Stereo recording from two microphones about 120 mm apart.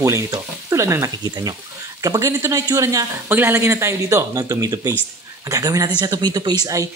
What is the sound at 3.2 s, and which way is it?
A woman's voice, 15° right (ahead or behind).